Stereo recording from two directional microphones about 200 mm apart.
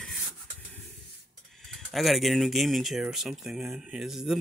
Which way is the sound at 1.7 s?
Centre (ahead or behind).